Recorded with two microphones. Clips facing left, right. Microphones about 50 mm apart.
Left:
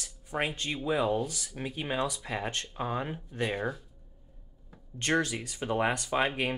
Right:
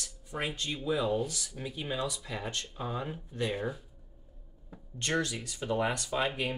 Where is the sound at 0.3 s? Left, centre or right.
Left.